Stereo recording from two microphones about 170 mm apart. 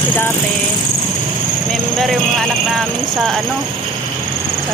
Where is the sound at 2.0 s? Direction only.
Centre (ahead or behind).